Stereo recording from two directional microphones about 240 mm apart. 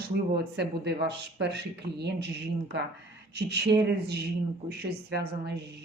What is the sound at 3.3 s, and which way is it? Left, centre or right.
Speech, right.